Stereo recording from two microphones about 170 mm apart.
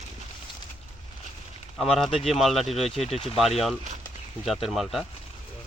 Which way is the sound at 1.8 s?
Centre (ahead or behind).